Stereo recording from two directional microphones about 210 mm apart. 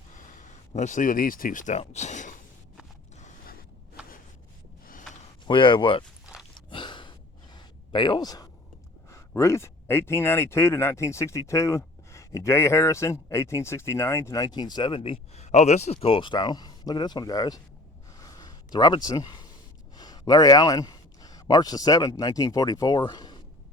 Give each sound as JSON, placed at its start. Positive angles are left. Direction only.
{"t": 0.3, "sound": "speech", "side_deg": 35}
{"t": 3.2, "sound": "creak", "side_deg": 35}
{"t": 5.5, "sound": "speech", "side_deg": 25}
{"t": 6.7, "sound": "gasp", "side_deg": 25}
{"t": 7.5, "sound": "a sound", "side_deg": 20}
{"t": 9.0, "sound": "speech", "side_deg": 15}
{"t": 18.1, "sound": "a sound", "side_deg": 15}
{"t": 20.0, "sound": "speech", "side_deg": 20}